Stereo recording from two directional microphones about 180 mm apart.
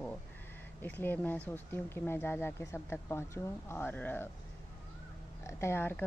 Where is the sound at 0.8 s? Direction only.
10° left (ahead or behind).